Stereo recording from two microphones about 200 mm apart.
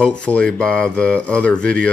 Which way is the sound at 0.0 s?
5° left (ahead or behind).